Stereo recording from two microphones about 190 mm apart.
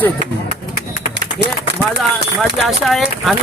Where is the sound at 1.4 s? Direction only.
65° right (ahead or behind).